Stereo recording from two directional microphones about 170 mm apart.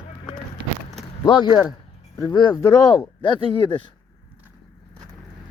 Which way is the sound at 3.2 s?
30° left (ahead or behind).